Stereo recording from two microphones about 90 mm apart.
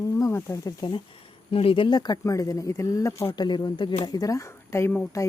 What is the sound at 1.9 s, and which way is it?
Speech, 50° left (ahead or behind).